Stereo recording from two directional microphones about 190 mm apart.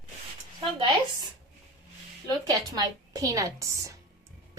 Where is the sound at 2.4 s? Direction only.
20° right (ahead or behind).